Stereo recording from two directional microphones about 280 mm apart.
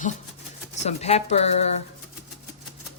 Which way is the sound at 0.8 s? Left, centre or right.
Left.